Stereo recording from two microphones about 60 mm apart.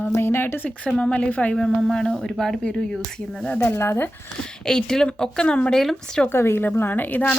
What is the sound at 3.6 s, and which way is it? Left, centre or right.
Speech, left.